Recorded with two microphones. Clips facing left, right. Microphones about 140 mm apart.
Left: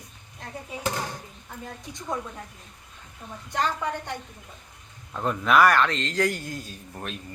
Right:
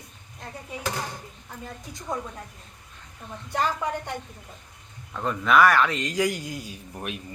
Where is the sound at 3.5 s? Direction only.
5° right (ahead or behind).